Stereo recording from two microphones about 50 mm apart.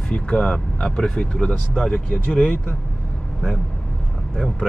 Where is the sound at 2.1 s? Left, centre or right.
Left.